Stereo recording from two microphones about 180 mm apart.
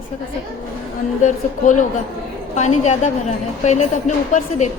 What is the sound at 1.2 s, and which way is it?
A woman's voice, 45° left (ahead or behind).